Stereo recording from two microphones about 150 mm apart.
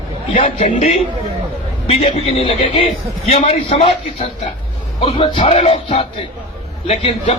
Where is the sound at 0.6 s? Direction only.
50° left (ahead or behind).